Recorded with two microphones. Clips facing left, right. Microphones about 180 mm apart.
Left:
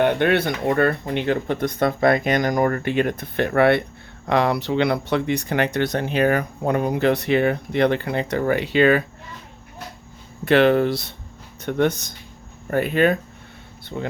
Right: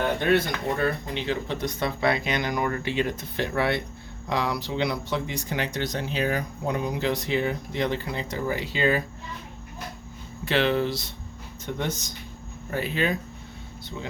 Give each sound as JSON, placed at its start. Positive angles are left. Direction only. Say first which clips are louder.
{"t": 0.0, "sound": "speech", "louder": "left 5 dB", "side_deg": 65}
{"t": 10.4, "sound": "speech", "louder": "left 8 dB", "side_deg": 55}